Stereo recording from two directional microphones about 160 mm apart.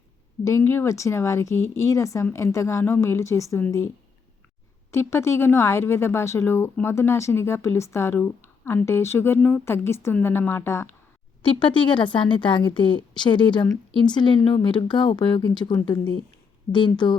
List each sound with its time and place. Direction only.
0.4 s a woman's voice: 15° left (ahead or behind)
4.9 s a woman's voice: 15° left (ahead or behind)
11.4 s a woman's voice: 30° left (ahead or behind)